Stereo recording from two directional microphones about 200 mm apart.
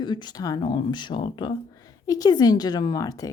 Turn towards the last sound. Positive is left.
turn(degrees=20)  # may be behind; listen again after turning